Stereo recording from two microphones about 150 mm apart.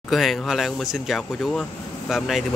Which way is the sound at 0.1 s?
Centre (ahead or behind).